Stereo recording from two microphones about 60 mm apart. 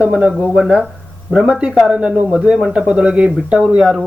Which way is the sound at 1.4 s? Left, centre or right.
Centre.